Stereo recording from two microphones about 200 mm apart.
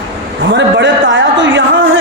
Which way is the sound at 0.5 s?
65° right (ahead or behind).